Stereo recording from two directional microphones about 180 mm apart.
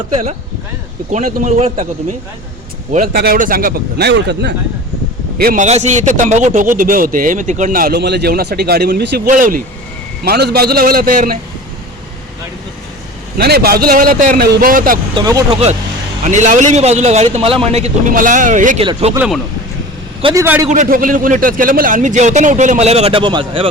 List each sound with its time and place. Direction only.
0.1 s a man's voice: 40° right (ahead or behind)
2.9 s a man's voice: 50° right (ahead or behind); by 4.5 s 75° right (ahead or behind)
5.4 s speech: 55° right (ahead or behind)
5.6 s speech: 40° right (ahead or behind)
10.2 s a man's voice: 60° right (ahead or behind)
13.4 s speech: 60° right (ahead or behind)
15.1 s speech: 20° right (ahead or behind)
16.2 s a man's voice: 40° right (ahead or behind)
18.1 s speech: 50° right (ahead or behind)
18.8 s a man's voice: 35° right (ahead or behind)
20.3 s a man's voice: 15° right (ahead or behind)
20.7 s speech: 50° right (ahead or behind); by 23.6 s 30° right (ahead or behind)